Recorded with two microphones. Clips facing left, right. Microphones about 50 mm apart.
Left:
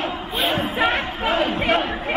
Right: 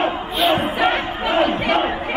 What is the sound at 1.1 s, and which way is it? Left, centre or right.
Battle cry, right.